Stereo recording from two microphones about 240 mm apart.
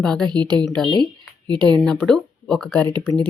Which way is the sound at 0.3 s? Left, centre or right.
Centre.